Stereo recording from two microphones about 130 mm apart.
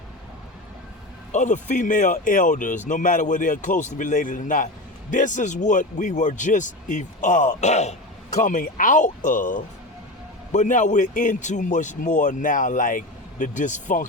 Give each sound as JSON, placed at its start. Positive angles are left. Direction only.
{"t": 1.3, "sound": "speech", "side_deg": 70}
{"t": 5.1, "sound": "a man's voice", "side_deg": 75}
{"t": 8.4, "sound": "speech", "side_deg": 85}
{"t": 10.5, "sound": "a man's voice", "side_deg": 70}